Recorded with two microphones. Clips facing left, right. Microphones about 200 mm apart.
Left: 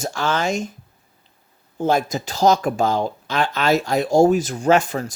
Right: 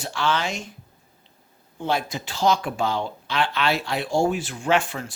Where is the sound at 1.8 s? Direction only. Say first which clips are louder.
Left 6 dB; 45° left (ahead or behind).